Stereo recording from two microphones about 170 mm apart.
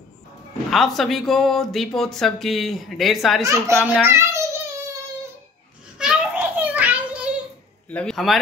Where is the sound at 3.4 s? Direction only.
15° right (ahead or behind).